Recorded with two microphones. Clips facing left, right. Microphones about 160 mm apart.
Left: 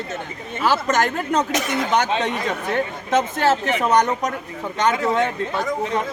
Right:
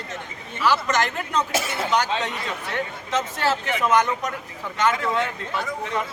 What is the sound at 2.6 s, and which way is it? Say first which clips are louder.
Speech: left 6 dB; 45° left (ahead or behind).